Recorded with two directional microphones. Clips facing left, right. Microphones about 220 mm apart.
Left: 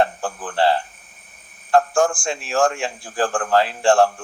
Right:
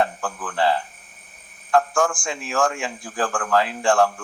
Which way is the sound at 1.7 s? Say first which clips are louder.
Left 3 dB; 30° left (ahead or behind).